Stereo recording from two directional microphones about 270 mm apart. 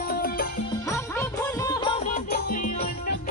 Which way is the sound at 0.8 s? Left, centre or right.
Centre.